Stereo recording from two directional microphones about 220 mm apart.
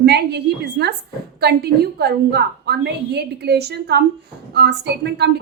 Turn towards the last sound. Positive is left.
turn(degrees=-50)  # may be behind; listen again after turning